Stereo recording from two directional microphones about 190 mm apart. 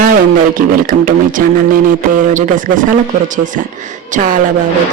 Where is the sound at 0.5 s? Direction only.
45° right (ahead or behind).